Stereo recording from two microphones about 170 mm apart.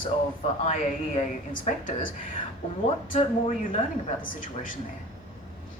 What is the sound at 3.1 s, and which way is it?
A woman's voice, 50° left (ahead or behind).